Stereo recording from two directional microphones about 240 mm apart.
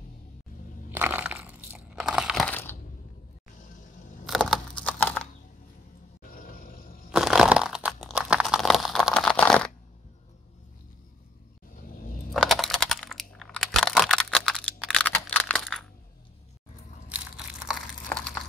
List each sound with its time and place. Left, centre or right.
0.9 s crunch: centre
4.3 s a sound: centre
6.3 s roar: left
7.1 s crunch: centre
11.7 s vehicle: left
12.4 s computer keyboard: centre
17.6 s a sound: centre